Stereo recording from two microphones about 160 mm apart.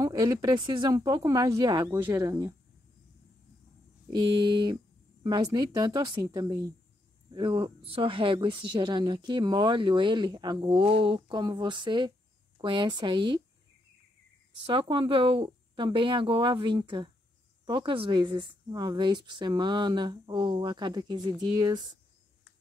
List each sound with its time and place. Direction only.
0.0 s a woman's voice: 20° right (ahead or behind)
1.9 s speech: 10° right (ahead or behind)
4.1 s a woman's voice: 30° right (ahead or behind)
14.7 s a woman's voice: 30° right (ahead or behind)